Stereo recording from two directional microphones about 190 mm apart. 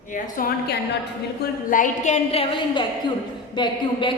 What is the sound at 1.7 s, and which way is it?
A woman's voice, 45° left (ahead or behind).